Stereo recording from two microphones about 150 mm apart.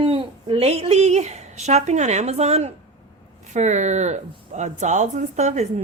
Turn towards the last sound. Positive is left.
turn(degrees=-50)  # may be behind; listen again after turning